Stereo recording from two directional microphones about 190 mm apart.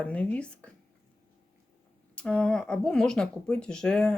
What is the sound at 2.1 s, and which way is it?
Speech, 5° left (ahead or behind).